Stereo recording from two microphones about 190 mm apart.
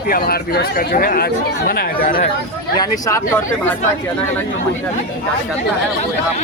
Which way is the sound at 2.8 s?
15° left (ahead or behind).